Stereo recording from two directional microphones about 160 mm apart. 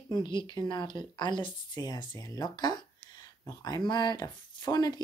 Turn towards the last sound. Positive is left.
turn(degrees=25)  # may be behind; listen again after turning